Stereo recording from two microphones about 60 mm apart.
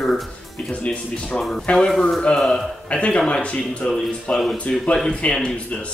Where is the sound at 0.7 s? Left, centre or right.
Centre.